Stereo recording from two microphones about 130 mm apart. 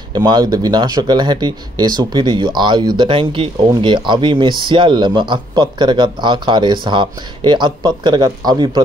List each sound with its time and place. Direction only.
0.1 s speech: 35° right (ahead or behind)